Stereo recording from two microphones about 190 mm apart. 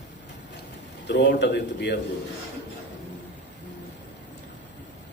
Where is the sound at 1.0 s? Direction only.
65° left (ahead or behind).